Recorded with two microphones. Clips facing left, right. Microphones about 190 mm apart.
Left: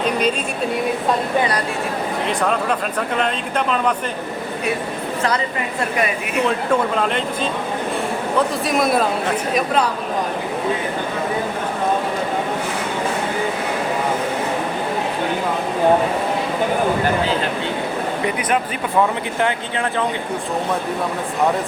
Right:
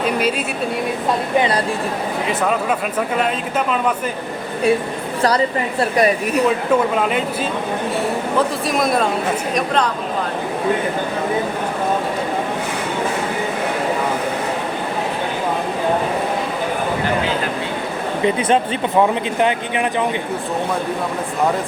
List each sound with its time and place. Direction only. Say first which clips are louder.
0.0 s a sound: even; 5° right (ahead or behind)
1.4 s speech: right 2 dB; 25° right (ahead or behind)
2.2 s speech: right 1 dB; 5° right (ahead or behind)
5.8 s a woman's voice: right 6 dB; 35° right (ahead or behind)
6.9 s speech: right 2 dB; 5° right (ahead or behind)
8.4 s speech: left 1 dB; centre (ahead or behind)
18.3 s speech: right 7 dB; 25° right (ahead or behind)